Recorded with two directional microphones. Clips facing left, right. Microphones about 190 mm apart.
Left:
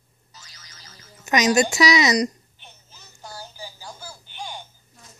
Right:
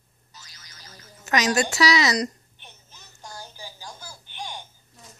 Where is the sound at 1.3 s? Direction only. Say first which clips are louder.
Left 4 dB; 15° left (ahead or behind).